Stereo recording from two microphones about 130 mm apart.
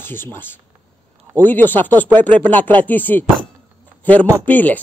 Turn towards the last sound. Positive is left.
turn(degrees=15)  # may be behind; listen again after turning